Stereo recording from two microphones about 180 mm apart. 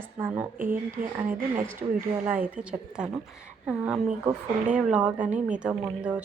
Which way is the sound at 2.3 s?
10° right (ahead or behind).